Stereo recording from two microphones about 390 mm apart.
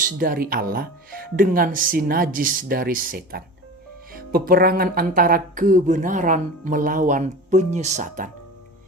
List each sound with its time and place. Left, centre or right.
0.0 s speech: right